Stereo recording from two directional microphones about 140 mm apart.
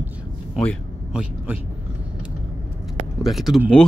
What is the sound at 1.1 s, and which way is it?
Speech, 10° right (ahead or behind).